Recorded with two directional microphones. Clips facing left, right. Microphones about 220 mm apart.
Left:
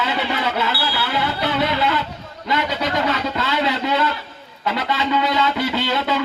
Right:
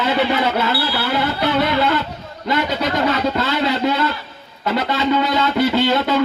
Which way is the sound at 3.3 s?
45° right (ahead or behind).